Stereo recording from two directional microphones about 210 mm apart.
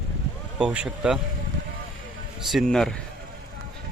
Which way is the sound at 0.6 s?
5° right (ahead or behind).